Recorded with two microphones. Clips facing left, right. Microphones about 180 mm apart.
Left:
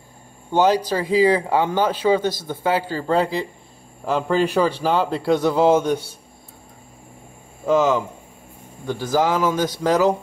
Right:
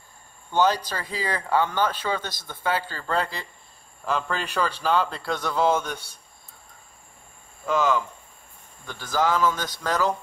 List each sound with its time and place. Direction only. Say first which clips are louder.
0.6 s speech: left 5 dB; 10° left (ahead or behind)
7.6 s speech: left 6 dB; 20° left (ahead or behind)